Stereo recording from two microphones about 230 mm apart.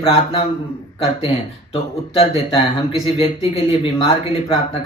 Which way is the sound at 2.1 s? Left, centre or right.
Left.